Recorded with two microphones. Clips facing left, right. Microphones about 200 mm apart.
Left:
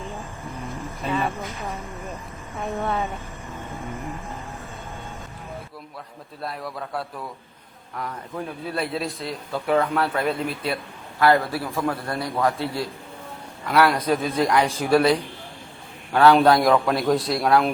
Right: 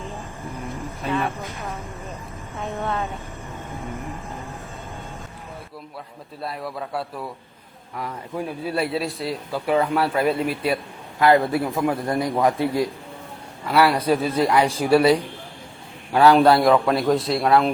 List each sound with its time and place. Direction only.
0.0 s vehicle: centre (ahead or behind)
1.5 s a man's voice: centre (ahead or behind)
6.4 s a man's voice: centre (ahead or behind)
8.4 s a man's voice: 5° right (ahead or behind)
13.7 s a man's voice: 5° right (ahead or behind)